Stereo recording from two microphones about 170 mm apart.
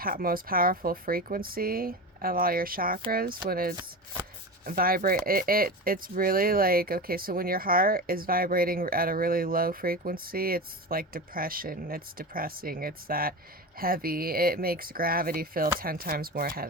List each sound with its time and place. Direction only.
0.0 s speech: 60° right (ahead or behind)